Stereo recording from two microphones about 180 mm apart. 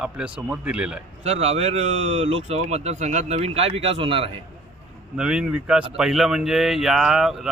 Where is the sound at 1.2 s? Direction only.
35° right (ahead or behind).